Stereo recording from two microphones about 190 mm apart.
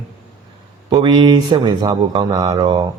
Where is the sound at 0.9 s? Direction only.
25° right (ahead or behind).